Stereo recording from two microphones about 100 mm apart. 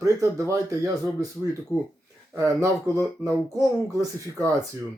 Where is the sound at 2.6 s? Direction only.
30° right (ahead or behind).